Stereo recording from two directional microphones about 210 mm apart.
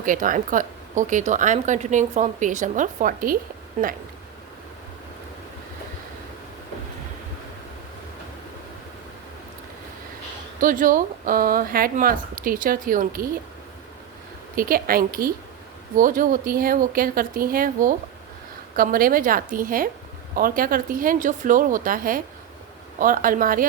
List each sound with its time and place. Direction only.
0.0 s speech: 40° right (ahead or behind)
10.6 s speech: 40° right (ahead or behind)
14.5 s a woman's voice: 45° right (ahead or behind)